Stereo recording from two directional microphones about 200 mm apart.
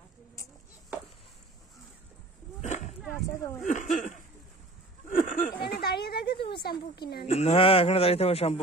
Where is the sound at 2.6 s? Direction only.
35° left (ahead or behind).